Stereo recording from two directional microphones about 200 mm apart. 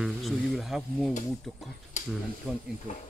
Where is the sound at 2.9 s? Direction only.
35° left (ahead or behind).